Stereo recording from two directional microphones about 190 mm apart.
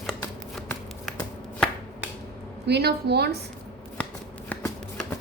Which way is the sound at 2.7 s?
60° right (ahead or behind).